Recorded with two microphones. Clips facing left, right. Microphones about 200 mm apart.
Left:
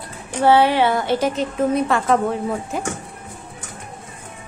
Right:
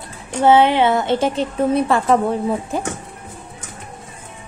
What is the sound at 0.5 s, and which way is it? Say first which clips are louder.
A woman's voice: right 2 dB; 20° right (ahead or behind).